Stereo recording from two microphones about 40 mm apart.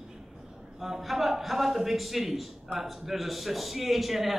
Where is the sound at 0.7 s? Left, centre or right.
Centre.